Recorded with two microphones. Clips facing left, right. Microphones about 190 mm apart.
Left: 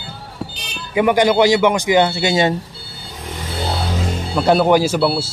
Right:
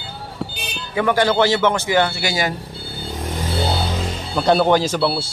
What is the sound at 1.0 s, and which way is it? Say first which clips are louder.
Speech: left 3 dB; 15° left (ahead or behind).